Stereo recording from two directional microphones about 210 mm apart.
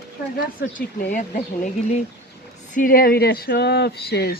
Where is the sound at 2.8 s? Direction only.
40° left (ahead or behind).